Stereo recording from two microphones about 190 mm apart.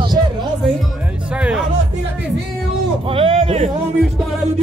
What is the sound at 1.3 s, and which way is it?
Music, 5° right (ahead or behind).